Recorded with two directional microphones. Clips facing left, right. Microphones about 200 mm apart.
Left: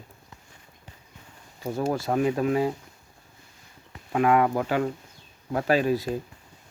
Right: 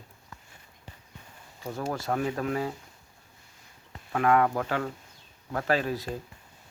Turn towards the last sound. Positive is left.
turn(degrees=10)  # may be behind; listen again after turning